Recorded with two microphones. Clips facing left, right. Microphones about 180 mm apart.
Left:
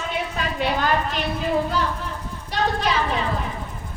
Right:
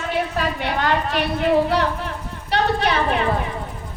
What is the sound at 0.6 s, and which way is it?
Speech, 65° right (ahead or behind).